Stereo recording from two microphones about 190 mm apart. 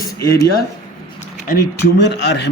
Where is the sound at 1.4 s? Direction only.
55° left (ahead or behind).